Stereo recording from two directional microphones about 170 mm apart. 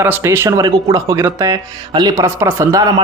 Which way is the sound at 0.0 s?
15° right (ahead or behind).